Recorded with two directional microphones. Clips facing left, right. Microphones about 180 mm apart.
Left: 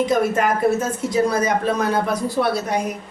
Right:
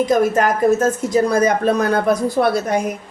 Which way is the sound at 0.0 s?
45° right (ahead or behind).